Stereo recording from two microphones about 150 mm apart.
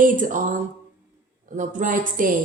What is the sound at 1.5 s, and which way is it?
Speech, 55° right (ahead or behind).